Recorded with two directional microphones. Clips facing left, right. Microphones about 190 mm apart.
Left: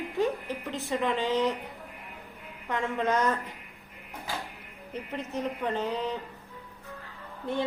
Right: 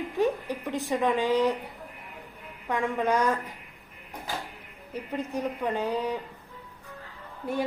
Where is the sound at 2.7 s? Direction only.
15° right (ahead or behind).